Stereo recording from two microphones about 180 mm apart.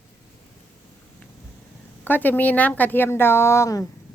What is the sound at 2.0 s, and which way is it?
Speech, 10° left (ahead or behind).